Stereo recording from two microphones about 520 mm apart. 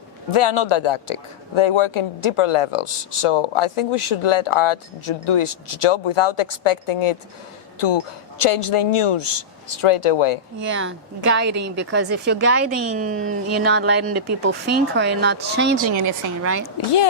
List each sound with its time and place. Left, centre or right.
0.3 s speech: left
10.7 s a woman's voice: right